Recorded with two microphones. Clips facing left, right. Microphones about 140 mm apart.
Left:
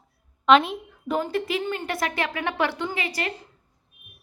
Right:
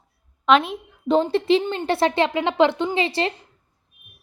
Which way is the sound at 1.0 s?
25° right (ahead or behind).